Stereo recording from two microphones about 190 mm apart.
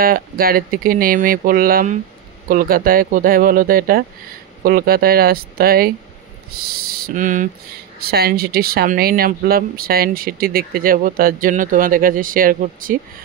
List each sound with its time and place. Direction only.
0.0 s speech: 50° right (ahead or behind)
8.0 s speech: 55° right (ahead or behind)